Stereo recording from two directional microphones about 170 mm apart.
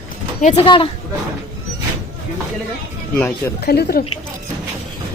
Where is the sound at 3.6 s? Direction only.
70° left (ahead or behind).